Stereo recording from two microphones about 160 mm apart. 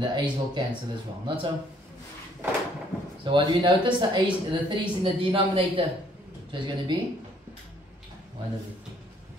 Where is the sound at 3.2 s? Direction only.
30° right (ahead or behind).